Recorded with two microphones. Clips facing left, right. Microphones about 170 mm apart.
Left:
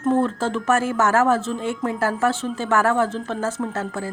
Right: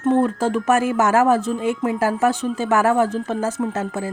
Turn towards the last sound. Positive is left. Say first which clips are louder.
# right 3 dB
turn(degrees=-20)  # may be behind; listen again after turning